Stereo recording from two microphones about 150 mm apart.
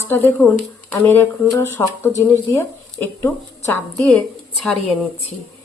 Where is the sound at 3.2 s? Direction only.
15° left (ahead or behind).